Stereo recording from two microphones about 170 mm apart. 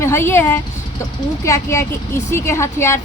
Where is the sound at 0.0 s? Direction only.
15° left (ahead or behind).